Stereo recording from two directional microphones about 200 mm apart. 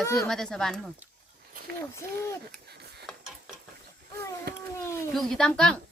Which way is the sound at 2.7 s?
55° right (ahead or behind).